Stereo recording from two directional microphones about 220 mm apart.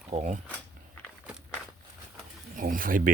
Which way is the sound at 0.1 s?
30° right (ahead or behind).